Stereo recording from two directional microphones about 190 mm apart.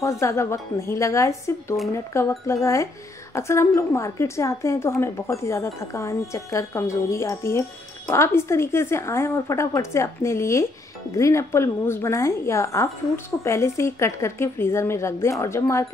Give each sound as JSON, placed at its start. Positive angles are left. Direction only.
{"t": 0.0, "sound": "speech", "side_deg": 15}